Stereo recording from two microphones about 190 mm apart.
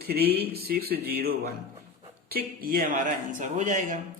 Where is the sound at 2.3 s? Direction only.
50° right (ahead or behind).